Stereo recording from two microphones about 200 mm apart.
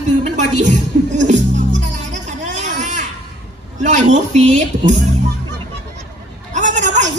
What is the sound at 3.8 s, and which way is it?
A man's voice, 35° right (ahead or behind).